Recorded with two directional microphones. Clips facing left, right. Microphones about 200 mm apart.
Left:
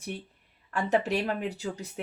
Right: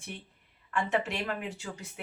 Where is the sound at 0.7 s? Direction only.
40° left (ahead or behind).